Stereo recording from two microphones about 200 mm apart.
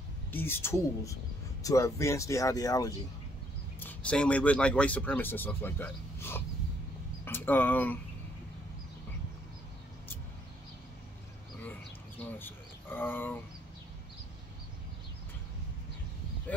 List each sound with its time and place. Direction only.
0.3 s speech: 10° left (ahead or behind)
3.8 s speech: 5° left (ahead or behind)
12.4 s speech: 10° left (ahead or behind)